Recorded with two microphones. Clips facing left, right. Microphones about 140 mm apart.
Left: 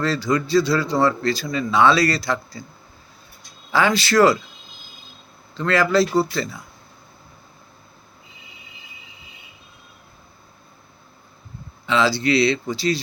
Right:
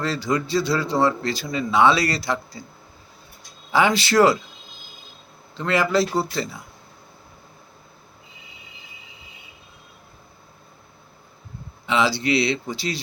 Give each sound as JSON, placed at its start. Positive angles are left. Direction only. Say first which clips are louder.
{"t": 0.0, "sound": "speech", "louder": "left 2 dB", "side_deg": -20}
{"t": 3.7, "sound": "speech", "louder": "even", "side_deg": -20}
{"t": 5.5, "sound": "speech", "louder": "left 2 dB", "side_deg": -20}
{"t": 11.9, "sound": "speech", "louder": "left 2 dB", "side_deg": -20}